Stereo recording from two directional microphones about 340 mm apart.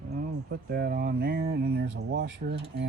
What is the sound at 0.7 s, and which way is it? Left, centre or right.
Speech, right.